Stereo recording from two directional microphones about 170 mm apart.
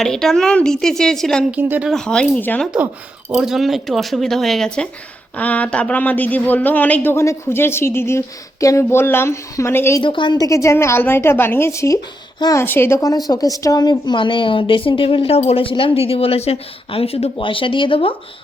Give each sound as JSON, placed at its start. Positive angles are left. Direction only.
{"t": 0.0, "sound": "speech", "side_deg": 0}
{"t": 1.5, "sound": "speech", "side_deg": -10}
{"t": 1.9, "sound": "speech", "side_deg": 5}
{"t": 2.7, "sound": "speech", "side_deg": -10}
{"t": 10.0, "sound": "speech", "side_deg": 30}